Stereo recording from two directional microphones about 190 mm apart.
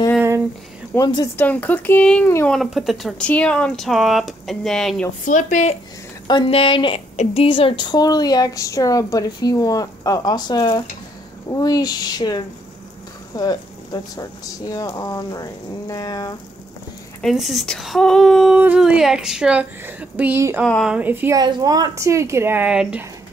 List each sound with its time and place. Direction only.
0.9 s a woman's voice: 20° left (ahead or behind)
1.3 s speech: 10° left (ahead or behind)
5.2 s speech: 40° left (ahead or behind)
6.2 s a woman's voice: 25° left (ahead or behind)
17.2 s speech: centre (ahead or behind)
20.6 s speech: centre (ahead or behind)
21.4 s speech: 20° right (ahead or behind); by 23.0 s 5° right (ahead or behind)